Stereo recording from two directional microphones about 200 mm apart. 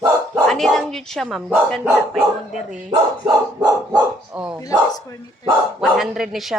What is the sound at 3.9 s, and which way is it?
Speech, 5° right (ahead or behind).